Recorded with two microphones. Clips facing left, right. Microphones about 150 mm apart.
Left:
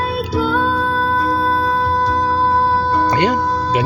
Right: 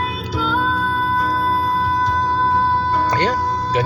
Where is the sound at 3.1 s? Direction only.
10° left (ahead or behind).